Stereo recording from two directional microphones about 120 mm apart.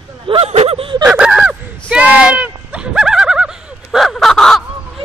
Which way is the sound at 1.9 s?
10° right (ahead or behind).